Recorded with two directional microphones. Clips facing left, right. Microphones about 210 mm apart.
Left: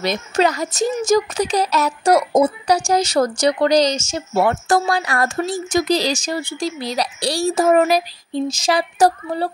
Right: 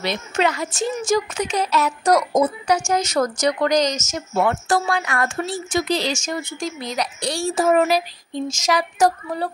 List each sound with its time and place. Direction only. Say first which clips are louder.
0.0 s speech: left 3 dB; 40° left (ahead or behind)
2.0 s speech: left 3 dB; 30° left (ahead or behind)
4.6 s speech: left 3 dB; 40° left (ahead or behind)